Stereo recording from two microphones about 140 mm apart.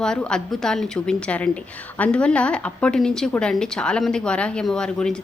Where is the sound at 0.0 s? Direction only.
5° left (ahead or behind).